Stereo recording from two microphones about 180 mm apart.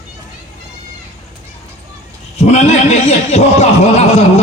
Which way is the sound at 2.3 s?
35° left (ahead or behind).